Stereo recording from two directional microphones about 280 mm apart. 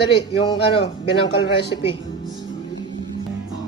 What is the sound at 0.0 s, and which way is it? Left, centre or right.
A man's voice, centre.